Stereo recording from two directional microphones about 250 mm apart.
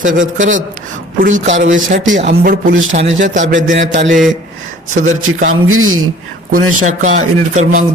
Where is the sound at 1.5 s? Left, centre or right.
Right.